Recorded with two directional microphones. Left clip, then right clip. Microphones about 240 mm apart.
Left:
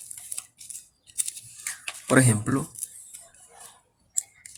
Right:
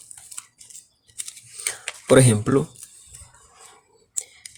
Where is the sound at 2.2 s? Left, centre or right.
Right.